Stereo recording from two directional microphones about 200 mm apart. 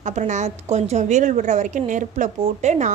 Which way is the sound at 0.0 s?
35° right (ahead or behind).